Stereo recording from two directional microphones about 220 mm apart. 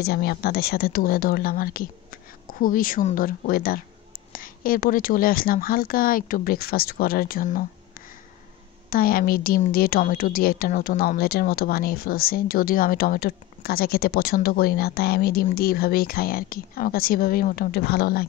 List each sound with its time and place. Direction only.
0.0 s speech: 45° left (ahead or behind)
8.9 s a woman's voice: 40° left (ahead or behind)